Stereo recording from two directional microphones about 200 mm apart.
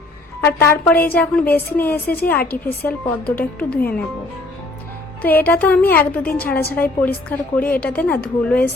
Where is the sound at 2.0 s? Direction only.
50° left (ahead or behind).